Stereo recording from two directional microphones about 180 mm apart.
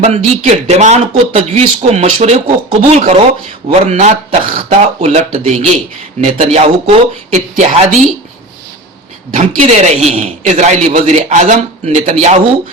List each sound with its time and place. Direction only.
0.0 s speech: 40° right (ahead or behind)
9.3 s speech: 40° right (ahead or behind)